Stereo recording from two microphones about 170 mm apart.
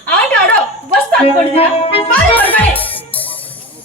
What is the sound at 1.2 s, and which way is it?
Speech, 35° left (ahead or behind).